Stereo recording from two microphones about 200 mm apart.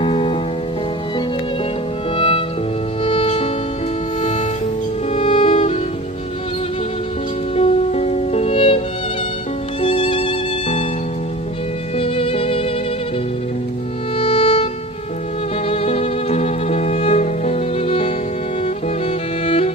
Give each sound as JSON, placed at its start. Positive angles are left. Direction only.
{"t": 0.0, "sound": "music", "side_deg": 25}
{"t": 2.1, "sound": "music", "side_deg": 25}
{"t": 7.5, "sound": "music", "side_deg": 30}
{"t": 9.8, "sound": "violin", "side_deg": 25}
{"t": 11.9, "sound": "music", "side_deg": 30}
{"t": 14.2, "sound": "music", "side_deg": 30}
{"t": 19.5, "sound": "music", "side_deg": 30}